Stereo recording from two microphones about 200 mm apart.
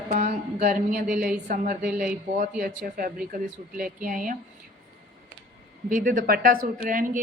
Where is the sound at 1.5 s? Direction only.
45° right (ahead or behind).